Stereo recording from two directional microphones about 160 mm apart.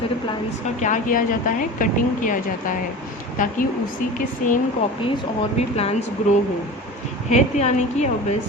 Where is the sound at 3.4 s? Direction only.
55° left (ahead or behind).